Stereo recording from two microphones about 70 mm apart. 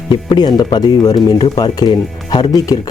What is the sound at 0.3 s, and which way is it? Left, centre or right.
Speech, left.